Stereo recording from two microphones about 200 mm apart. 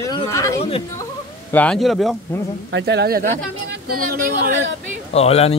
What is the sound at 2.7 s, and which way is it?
Speech, 55° right (ahead or behind).